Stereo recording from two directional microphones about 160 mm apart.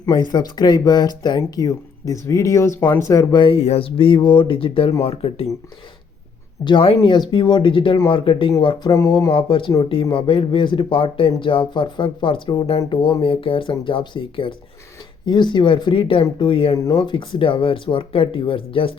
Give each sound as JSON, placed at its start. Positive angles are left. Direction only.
{"t": 0.0, "sound": "speech", "side_deg": 25}
{"t": 3.4, "sound": "speech", "side_deg": 40}
{"t": 6.7, "sound": "speech", "side_deg": 30}
{"t": 9.3, "sound": "speech", "side_deg": 30}